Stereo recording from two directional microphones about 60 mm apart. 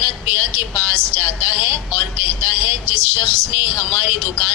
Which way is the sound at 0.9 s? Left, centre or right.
Right.